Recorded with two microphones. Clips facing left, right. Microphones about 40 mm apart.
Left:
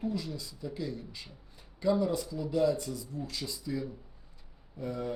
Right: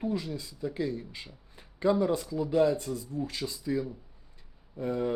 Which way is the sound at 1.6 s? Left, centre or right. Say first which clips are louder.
Right 3 dB; right.